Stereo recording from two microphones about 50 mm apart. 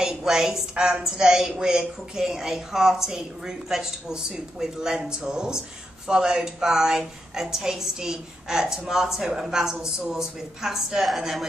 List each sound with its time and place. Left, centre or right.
0.0 s a woman's voice: centre